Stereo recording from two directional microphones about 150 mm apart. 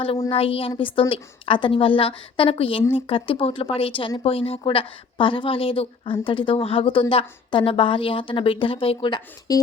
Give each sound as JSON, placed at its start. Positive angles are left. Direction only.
{"t": 0.3, "sound": "a woman's voice", "side_deg": 40}